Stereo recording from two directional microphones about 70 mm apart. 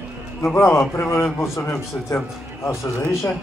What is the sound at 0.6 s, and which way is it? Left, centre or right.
A man's voice, left.